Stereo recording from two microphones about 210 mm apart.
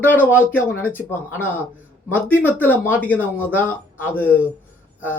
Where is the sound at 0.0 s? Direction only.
10° left (ahead or behind).